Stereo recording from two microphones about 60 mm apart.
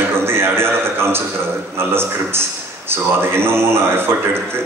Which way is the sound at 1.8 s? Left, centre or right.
Right.